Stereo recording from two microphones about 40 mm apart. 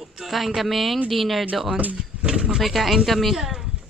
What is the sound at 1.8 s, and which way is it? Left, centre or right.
Speech, right.